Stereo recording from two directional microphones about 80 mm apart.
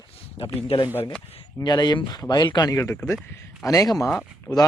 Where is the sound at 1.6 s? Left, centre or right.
Left.